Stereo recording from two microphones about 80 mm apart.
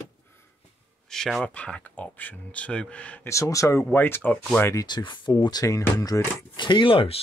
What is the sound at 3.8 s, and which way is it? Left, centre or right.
Speech, left.